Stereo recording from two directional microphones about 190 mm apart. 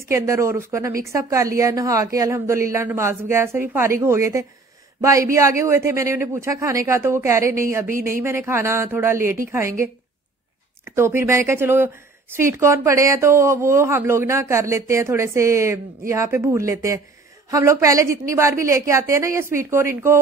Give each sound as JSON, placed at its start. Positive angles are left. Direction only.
{"t": 0.1, "sound": "speech", "side_deg": -15}
{"t": 10.9, "sound": "speech", "side_deg": -15}